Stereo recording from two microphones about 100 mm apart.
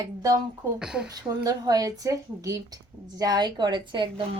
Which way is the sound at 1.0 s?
40° right (ahead or behind).